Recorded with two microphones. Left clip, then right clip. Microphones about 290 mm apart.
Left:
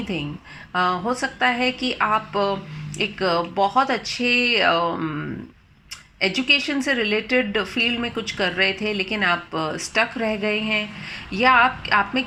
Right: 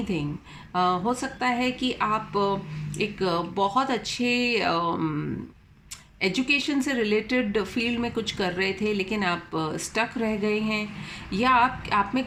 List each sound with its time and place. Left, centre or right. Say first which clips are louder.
0.7 s speech: left 2 dB; centre